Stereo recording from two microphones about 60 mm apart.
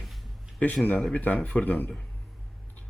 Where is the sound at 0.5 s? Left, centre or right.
Left.